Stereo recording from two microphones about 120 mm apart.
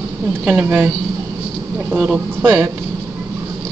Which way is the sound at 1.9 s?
10° right (ahead or behind).